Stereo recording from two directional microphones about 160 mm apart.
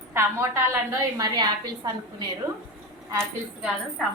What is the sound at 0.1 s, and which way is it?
A woman's voice, 15° right (ahead or behind).